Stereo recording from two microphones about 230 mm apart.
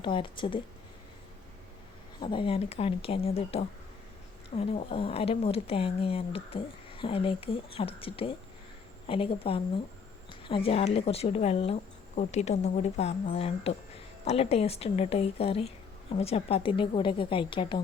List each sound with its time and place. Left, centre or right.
0.0 s speech: left
2.2 s speech: left